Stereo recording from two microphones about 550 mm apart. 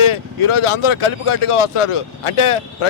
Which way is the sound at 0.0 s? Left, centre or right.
Left.